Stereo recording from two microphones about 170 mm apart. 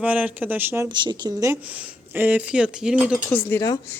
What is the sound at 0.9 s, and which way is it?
Speech, 25° right (ahead or behind).